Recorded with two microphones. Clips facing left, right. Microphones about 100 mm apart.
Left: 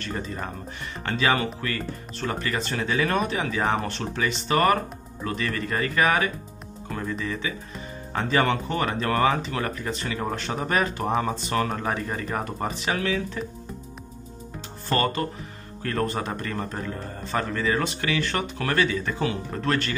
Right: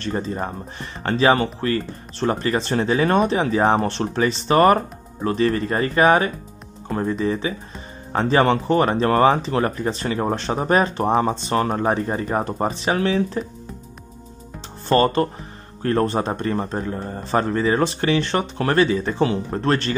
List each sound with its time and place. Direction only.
0.0 s speech: 30° right (ahead or behind)
14.9 s speech: 30° right (ahead or behind)